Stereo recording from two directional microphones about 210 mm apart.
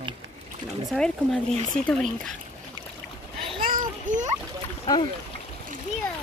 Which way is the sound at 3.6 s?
40° right (ahead or behind).